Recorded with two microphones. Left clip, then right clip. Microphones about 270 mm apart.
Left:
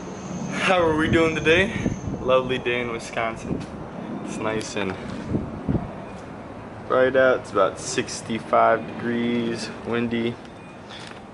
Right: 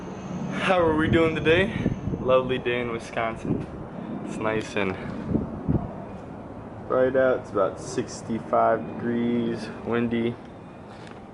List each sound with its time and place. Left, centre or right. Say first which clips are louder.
0.5 s speech: left 2 dB; centre
6.9 s speech: left 3 dB; centre